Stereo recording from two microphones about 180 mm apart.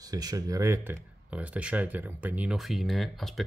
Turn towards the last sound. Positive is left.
turn(degrees=0)  # may be behind; listen again after turning